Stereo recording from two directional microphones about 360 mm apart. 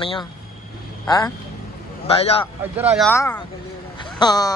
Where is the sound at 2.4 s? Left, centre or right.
Centre.